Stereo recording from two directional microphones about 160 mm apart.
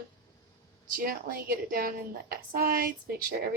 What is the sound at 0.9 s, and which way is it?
A woman's voice, 65° right (ahead or behind).